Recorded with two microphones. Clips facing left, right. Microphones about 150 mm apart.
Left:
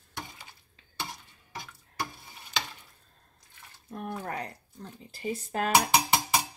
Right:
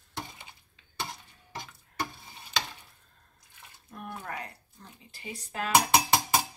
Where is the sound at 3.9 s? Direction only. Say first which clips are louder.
Left 4 dB; 40° left (ahead or behind).